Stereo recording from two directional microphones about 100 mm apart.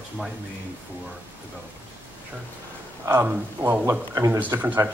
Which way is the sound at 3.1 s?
20° right (ahead or behind).